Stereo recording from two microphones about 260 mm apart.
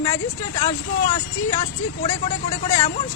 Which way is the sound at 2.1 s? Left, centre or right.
Centre.